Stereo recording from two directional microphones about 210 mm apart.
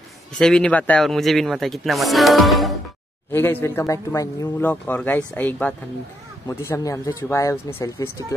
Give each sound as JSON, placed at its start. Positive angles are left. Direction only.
{"t": 0.4, "sound": "a man's voice", "side_deg": 5}
{"t": 3.3, "sound": "speech", "side_deg": 10}